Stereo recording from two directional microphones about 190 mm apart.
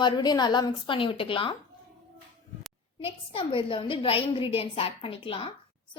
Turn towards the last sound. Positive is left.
turn(degrees=30)  # may be behind; listen again after turning